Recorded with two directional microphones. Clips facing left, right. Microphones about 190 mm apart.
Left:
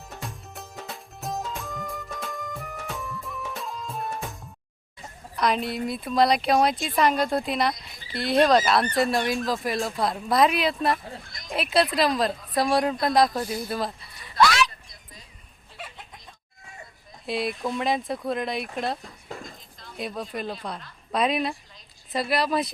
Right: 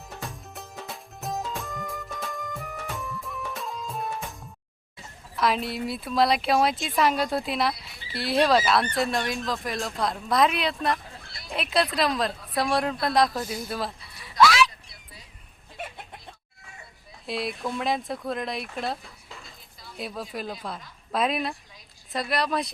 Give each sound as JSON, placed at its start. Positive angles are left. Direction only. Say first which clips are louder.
{"t": 0.2, "sound": "music", "louder": "even", "side_deg": 0}
{"t": 5.4, "sound": "a woman's voice", "louder": "left 1 dB", "side_deg": 0}
{"t": 14.7, "sound": "a sound", "louder": "left 1 dB", "side_deg": -10}
{"t": 17.2, "sound": "speech", "louder": "left 2 dB", "side_deg": 0}
{"t": 19.3, "sound": "a sound", "louder": "left 9 dB", "side_deg": 40}
{"t": 19.8, "sound": "speech", "louder": "left 2 dB", "side_deg": -5}